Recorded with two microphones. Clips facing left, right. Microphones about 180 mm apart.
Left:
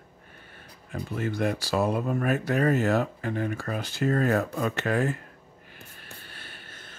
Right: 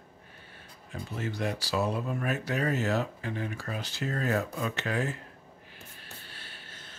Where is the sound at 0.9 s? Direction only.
55° left (ahead or behind).